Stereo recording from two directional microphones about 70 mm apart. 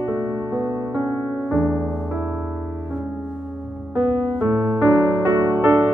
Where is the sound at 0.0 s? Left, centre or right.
Right.